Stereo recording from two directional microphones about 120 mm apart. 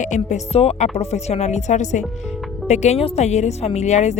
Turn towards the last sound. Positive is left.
turn(degrees=70)  # may be behind; listen again after turning